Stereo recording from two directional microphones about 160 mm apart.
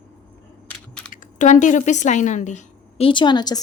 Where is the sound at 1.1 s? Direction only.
55° left (ahead or behind).